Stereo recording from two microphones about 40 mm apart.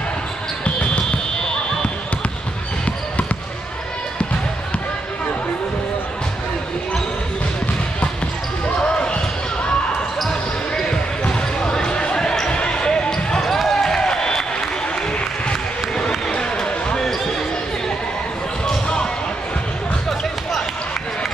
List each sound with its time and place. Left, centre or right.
0.7 s basketball bounce: left
8.8 s basketball bounce: left
10.9 s basketball bounce: centre
13.4 s basketball bounce: centre
16.3 s basketball bounce: left